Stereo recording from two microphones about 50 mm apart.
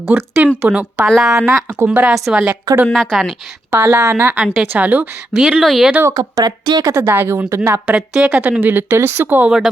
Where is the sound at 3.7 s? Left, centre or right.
Right.